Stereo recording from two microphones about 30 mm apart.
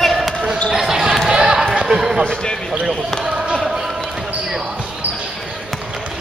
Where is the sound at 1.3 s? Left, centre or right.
Right.